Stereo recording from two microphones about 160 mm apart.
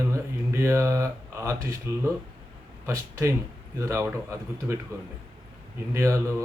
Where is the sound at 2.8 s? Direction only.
15° right (ahead or behind).